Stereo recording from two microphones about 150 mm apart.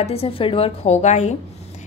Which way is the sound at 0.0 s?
40° left (ahead or behind).